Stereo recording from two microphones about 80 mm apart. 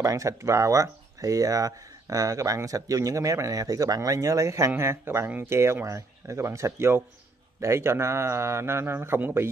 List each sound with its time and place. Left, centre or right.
0.0 s a man's voice: right